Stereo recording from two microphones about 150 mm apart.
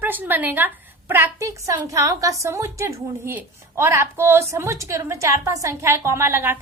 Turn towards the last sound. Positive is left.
turn(degrees=-15)  # may be behind; listen again after turning